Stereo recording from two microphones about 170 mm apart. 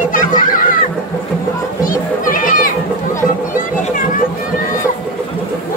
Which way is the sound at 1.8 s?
55° left (ahead or behind).